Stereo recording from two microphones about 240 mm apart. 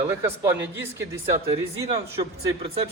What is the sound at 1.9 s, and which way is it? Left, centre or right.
Speech, right.